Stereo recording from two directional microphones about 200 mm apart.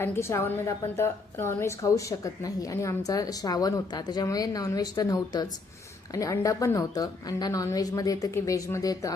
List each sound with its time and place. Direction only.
0.0 s a woman's voice: 15° left (ahead or behind)